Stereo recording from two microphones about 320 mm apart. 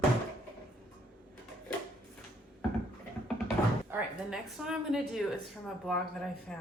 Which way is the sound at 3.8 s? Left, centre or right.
Centre.